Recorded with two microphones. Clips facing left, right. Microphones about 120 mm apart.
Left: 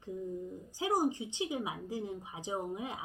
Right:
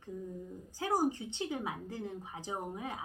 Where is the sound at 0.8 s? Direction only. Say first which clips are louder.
Left 1 dB; 15° left (ahead or behind).